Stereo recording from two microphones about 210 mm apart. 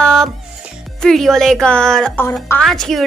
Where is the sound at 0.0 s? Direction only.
5° left (ahead or behind).